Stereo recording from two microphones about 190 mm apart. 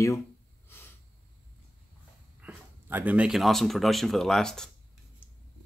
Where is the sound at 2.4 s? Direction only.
10° right (ahead or behind).